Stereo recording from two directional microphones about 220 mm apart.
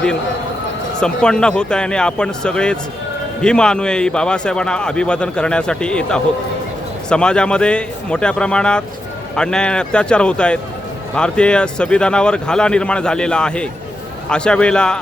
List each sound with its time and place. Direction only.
0.9 s speech: 5° left (ahead or behind)